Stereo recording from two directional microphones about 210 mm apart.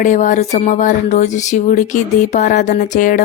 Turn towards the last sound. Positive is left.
turn(degrees=40)  # may be behind; listen again after turning